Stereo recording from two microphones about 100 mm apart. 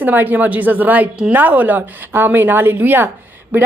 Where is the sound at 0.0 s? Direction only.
20° right (ahead or behind).